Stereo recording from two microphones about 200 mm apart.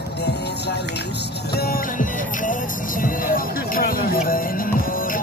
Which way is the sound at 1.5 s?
50° left (ahead or behind).